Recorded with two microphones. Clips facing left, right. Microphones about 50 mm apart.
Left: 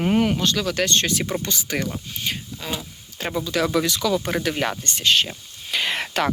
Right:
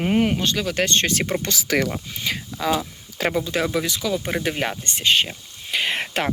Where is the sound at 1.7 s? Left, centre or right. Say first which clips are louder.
Right 6 dB; right.